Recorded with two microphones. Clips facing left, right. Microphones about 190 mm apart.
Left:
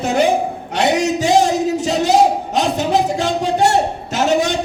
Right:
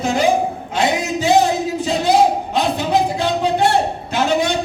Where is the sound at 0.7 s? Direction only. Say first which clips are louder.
Left 3 dB; 80° left.